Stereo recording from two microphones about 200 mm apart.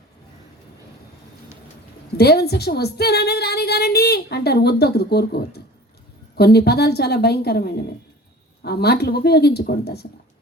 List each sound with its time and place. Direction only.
2.1 s a woman's voice: 55° left (ahead or behind)